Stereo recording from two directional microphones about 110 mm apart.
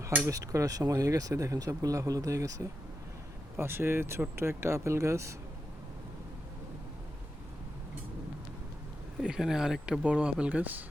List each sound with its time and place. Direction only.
0.0 s speech: 15° right (ahead or behind)
0.3 s speech: 30° right (ahead or behind)
9.2 s speech: 5° right (ahead or behind)